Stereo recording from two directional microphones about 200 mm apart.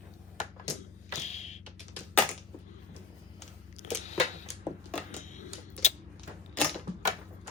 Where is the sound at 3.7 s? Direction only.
35° left (ahead or behind).